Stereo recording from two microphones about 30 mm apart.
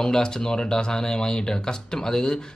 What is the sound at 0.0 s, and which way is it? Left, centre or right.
Speech, left.